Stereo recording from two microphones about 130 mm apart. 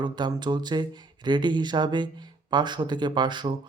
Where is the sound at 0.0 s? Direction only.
35° right (ahead or behind).